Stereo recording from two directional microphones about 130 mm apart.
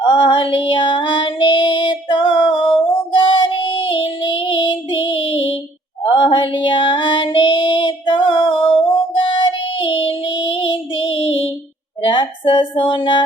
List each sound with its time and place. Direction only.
0.0 s female singing: 40° left (ahead or behind)
3.1 s child singing: 40° left (ahead or behind)
6.0 s female singing: 40° left (ahead or behind)
9.1 s child singing: 40° left (ahead or behind)
11.2 s music: 45° left (ahead or behind)
12.0 s female singing: 40° left (ahead or behind)